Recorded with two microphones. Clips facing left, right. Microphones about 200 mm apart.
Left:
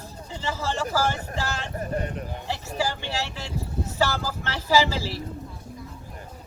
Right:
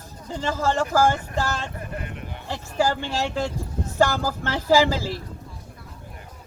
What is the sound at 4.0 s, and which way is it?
Speech, 50° right (ahead or behind).